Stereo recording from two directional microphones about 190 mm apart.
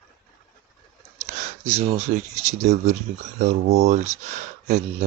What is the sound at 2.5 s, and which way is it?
Speech, 35° right (ahead or behind).